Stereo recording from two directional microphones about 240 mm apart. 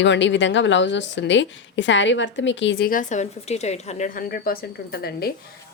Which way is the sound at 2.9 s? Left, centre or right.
Left.